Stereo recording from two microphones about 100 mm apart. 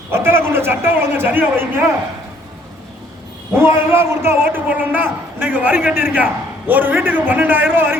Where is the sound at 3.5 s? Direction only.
25° right (ahead or behind).